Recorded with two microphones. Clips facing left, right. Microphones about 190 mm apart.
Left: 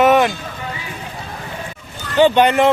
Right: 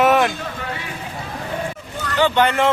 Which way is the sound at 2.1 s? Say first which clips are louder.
Left 5 dB; 15° left (ahead or behind).